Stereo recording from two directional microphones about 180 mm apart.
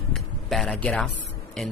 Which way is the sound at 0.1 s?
Centre (ahead or behind).